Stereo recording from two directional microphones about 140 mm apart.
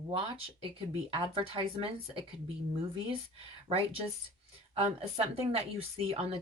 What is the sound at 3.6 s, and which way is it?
A woman's voice, 40° right (ahead or behind).